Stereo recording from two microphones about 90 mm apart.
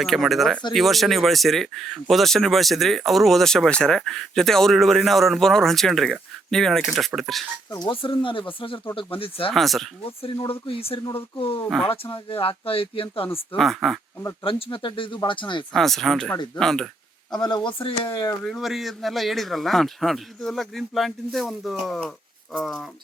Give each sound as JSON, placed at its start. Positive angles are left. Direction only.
{"t": 0.0, "sound": "speech", "side_deg": 0}
{"t": 7.9, "sound": "speech", "side_deg": 75}
{"t": 9.0, "sound": "speech", "side_deg": 85}
{"t": 9.5, "sound": "speech", "side_deg": 0}
{"t": 10.1, "sound": "speech", "side_deg": 90}
{"t": 13.6, "sound": "speech", "side_deg": 0}
{"t": 14.4, "sound": "speech", "side_deg": 85}
{"t": 15.7, "sound": "speech", "side_deg": 5}
{"t": 17.4, "sound": "speech", "side_deg": 55}
{"t": 17.8, "sound": "speech", "side_deg": 75}
{"t": 18.4, "sound": "speech", "side_deg": 0}